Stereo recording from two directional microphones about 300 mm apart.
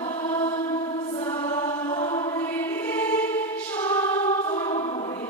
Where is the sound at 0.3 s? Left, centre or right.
Centre.